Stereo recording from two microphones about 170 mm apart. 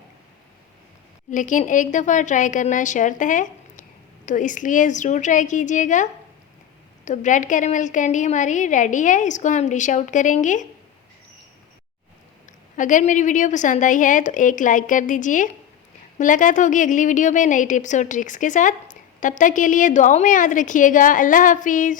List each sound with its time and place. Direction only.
1.3 s a woman's voice: 50° left (ahead or behind)
12.7 s a woman's voice: 50° left (ahead or behind)